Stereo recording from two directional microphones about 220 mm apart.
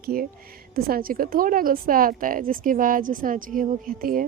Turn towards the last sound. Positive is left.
turn(degrees=-40)  # may be behind; listen again after turning